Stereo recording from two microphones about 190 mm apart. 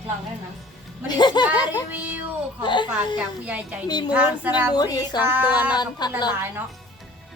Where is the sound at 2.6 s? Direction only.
25° left (ahead or behind).